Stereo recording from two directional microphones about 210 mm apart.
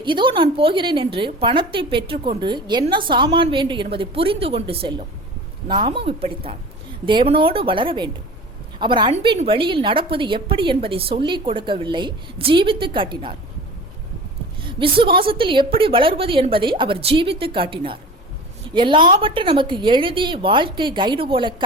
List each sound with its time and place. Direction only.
0.0 s a woman's voice: 25° right (ahead or behind)
14.6 s a woman's voice: 25° right (ahead or behind)